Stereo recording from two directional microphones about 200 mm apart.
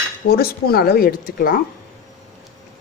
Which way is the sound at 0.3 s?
50° left (ahead or behind).